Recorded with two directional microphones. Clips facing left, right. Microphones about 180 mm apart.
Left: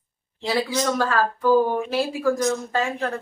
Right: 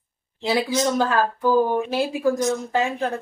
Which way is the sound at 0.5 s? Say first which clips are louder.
Right 2 dB; 20° right (ahead or behind).